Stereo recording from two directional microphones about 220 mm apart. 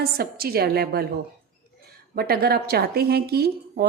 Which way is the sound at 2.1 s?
45° right (ahead or behind).